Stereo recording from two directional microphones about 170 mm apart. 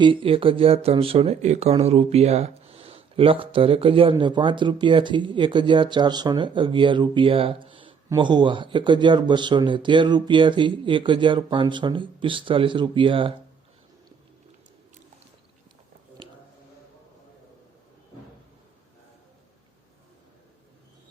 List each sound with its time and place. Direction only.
0.0 s a man's voice: 30° right (ahead or behind)